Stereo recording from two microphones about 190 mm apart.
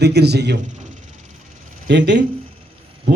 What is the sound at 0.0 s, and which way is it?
Speech, 60° right (ahead or behind).